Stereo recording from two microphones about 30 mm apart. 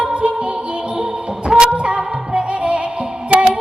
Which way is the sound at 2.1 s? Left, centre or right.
Right.